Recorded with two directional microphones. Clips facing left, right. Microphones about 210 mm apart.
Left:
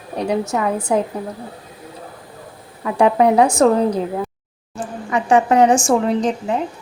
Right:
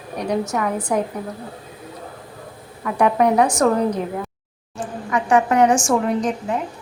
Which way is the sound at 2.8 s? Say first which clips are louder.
Left 3 dB; 25° left (ahead or behind).